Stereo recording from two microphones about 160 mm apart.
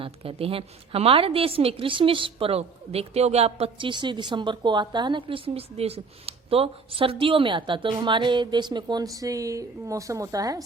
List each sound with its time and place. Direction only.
0.0 s a woman's voice: 35° right (ahead or behind)